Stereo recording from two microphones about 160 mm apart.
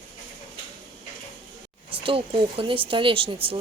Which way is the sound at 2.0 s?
35° right (ahead or behind).